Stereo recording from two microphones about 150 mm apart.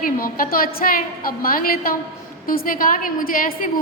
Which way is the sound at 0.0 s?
70° left (ahead or behind).